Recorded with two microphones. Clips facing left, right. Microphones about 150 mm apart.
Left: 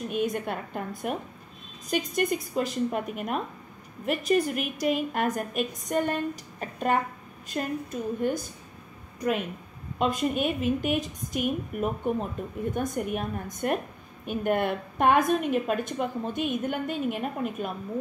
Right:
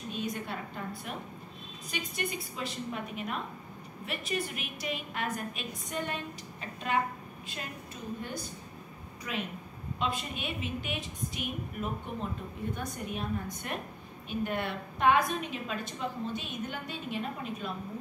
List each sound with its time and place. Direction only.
0.1 s a woman's voice: 55° left (ahead or behind)
9.9 s a woman's voice: 50° left (ahead or behind)